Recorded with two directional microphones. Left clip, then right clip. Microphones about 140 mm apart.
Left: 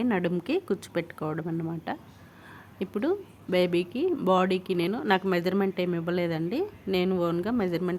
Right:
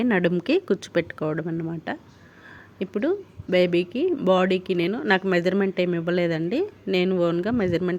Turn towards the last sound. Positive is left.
turn(degrees=-25)  # may be behind; listen again after turning